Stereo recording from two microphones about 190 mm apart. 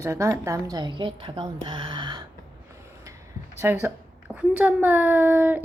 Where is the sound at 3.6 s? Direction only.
10° right (ahead or behind).